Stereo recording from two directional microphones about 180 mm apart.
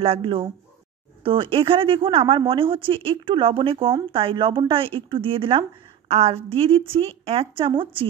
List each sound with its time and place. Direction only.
0.0 s a woman's voice: 30° right (ahead or behind)